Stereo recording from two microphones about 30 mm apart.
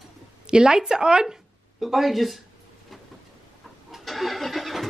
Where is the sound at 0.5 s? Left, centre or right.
Right.